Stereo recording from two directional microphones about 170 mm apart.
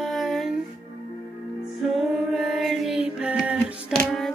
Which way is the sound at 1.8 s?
Centre (ahead or behind).